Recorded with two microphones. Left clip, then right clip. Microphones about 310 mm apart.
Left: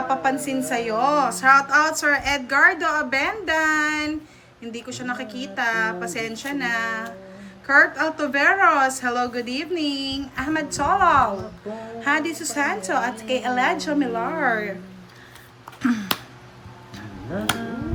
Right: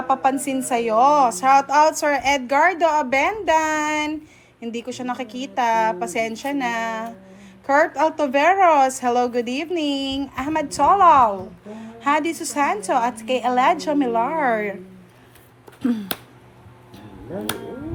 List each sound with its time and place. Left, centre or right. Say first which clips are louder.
0.1 s a woman's voice: right 5 dB; centre
15.8 s speech: left 1 dB; centre